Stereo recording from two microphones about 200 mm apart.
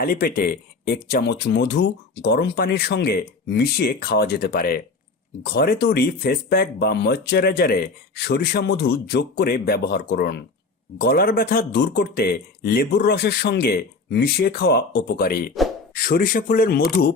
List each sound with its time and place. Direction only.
0.0 s speech: 50° left (ahead or behind)